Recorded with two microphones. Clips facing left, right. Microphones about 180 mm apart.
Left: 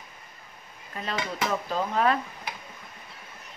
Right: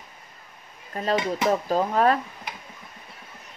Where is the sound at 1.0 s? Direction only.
40° right (ahead or behind).